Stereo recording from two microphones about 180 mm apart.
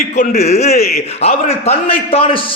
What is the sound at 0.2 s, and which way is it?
A man's voice, 40° left (ahead or behind).